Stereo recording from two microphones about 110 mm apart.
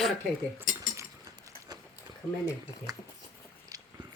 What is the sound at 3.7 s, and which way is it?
Biting, 35° right (ahead or behind).